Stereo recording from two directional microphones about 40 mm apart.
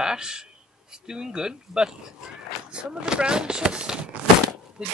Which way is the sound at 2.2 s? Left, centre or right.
Centre.